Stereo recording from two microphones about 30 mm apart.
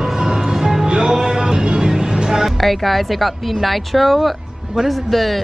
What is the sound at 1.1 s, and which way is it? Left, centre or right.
Music, right.